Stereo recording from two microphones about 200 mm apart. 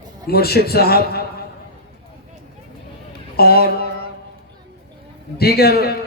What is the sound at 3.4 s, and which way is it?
Speech, 50° left (ahead or behind).